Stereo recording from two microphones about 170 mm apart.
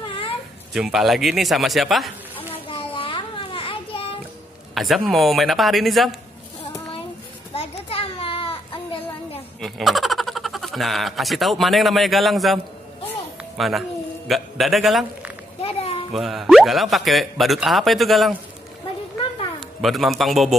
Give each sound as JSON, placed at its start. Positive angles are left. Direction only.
{"t": 0.0, "sound": "a sound", "side_deg": 30}
{"t": 0.7, "sound": "speech", "side_deg": 0}
{"t": 2.3, "sound": "children playing", "side_deg": 30}
{"t": 4.7, "sound": "speech", "side_deg": 0}
{"t": 7.5, "sound": "children playing", "side_deg": 35}
{"t": 9.6, "sound": "speech", "side_deg": 0}
{"t": 13.6, "sound": "a man's voice", "side_deg": 0}
{"t": 15.6, "sound": "children playing", "side_deg": 35}
{"t": 16.1, "sound": "speech", "side_deg": 0}
{"t": 19.8, "sound": "speech", "side_deg": 0}